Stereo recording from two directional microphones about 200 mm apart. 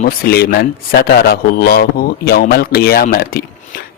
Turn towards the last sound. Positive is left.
turn(degrees=50)  # may be behind; listen again after turning